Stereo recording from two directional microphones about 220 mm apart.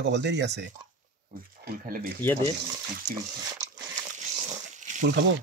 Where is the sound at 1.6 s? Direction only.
40° right (ahead or behind).